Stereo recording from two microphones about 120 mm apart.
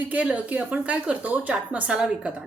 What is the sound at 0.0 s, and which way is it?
A woman's voice, 15° right (ahead or behind).